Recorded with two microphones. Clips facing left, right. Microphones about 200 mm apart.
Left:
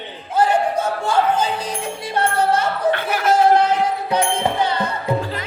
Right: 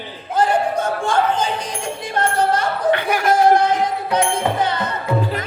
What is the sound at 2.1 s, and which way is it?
Music, 5° left (ahead or behind).